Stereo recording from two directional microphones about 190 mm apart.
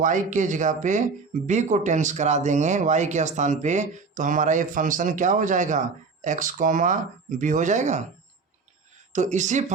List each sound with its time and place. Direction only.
0.0 s speech: 40° right (ahead or behind)
9.1 s speech: 40° right (ahead or behind)